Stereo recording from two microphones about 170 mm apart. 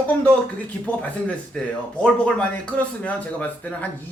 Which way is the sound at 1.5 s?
5° left (ahead or behind).